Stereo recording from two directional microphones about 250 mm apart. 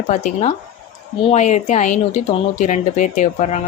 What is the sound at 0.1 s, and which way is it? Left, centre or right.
Speech, left.